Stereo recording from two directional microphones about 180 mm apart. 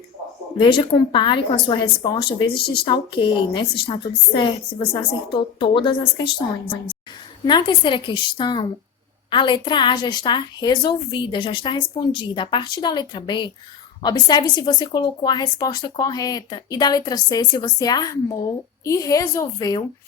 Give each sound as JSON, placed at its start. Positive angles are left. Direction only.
{"t": 0.6, "sound": "speech", "side_deg": 30}
{"t": 2.6, "sound": "speech", "side_deg": 60}
{"t": 2.8, "sound": "speech", "side_deg": 25}
{"t": 7.4, "sound": "speech", "side_deg": 25}